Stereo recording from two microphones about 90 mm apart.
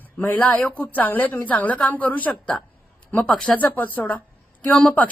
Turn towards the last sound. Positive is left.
turn(degrees=10)  # may be behind; listen again after turning